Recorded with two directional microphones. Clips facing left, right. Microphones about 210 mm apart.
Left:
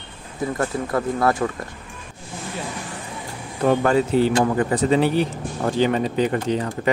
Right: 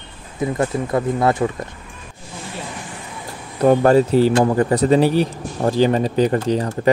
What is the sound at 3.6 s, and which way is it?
Speech, 35° right (ahead or behind).